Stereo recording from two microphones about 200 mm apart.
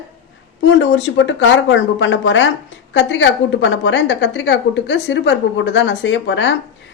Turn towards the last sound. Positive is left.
turn(degrees=65)  # may be behind; listen again after turning